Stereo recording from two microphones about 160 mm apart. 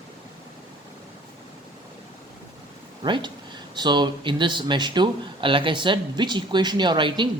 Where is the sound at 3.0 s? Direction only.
30° right (ahead or behind).